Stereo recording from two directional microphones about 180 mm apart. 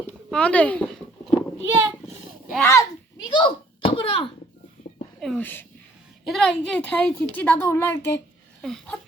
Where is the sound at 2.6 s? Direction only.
15° left (ahead or behind).